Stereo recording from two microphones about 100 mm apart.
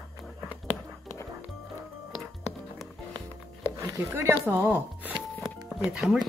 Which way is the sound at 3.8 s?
25° right (ahead or behind).